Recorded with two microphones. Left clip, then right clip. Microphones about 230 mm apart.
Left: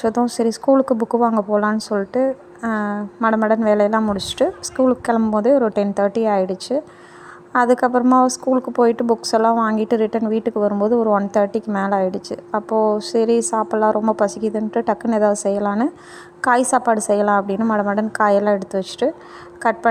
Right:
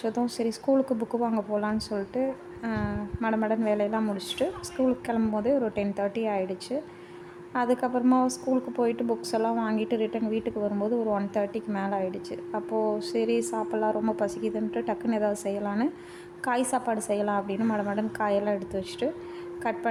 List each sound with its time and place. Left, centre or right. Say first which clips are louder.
0.0 s a woman's voice: left 10 dB; left